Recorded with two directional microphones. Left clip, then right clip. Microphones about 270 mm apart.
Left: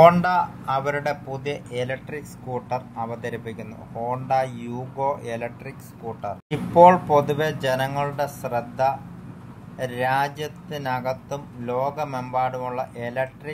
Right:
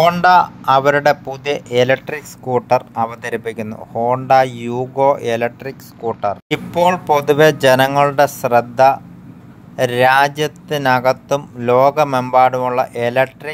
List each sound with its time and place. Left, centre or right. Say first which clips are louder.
0.0 s speech: right 4 dB; right